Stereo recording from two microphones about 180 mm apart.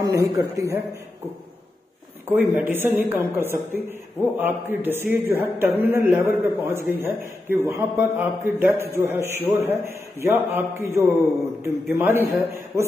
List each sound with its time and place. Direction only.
0.0 s a man's voice: 15° right (ahead or behind)
2.2 s a man's voice: 10° right (ahead or behind)